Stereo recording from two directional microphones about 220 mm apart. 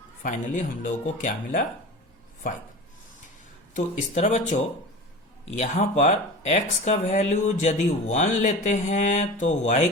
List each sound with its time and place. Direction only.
0.2 s speech: 35° left (ahead or behind)
3.8 s speech: 30° left (ahead or behind)